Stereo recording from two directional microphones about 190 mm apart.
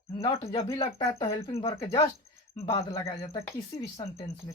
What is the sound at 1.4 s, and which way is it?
Speech, 30° left (ahead or behind).